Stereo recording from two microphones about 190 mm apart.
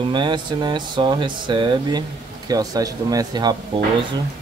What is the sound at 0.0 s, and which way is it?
Speech, 25° right (ahead or behind).